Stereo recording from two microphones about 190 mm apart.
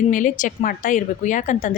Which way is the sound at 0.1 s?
45° left (ahead or behind).